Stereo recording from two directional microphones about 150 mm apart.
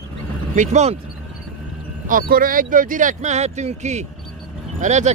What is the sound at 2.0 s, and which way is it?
Speech, 70° right (ahead or behind).